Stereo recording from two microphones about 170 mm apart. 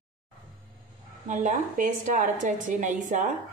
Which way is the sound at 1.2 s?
45° right (ahead or behind).